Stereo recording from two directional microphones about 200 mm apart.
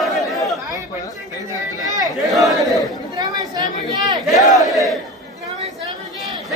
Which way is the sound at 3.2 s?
20° right (ahead or behind).